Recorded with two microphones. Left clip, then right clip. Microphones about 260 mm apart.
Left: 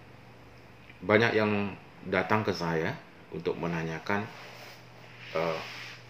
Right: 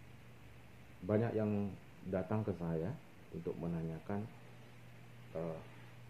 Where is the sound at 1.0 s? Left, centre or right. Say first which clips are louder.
Left 12 dB; left.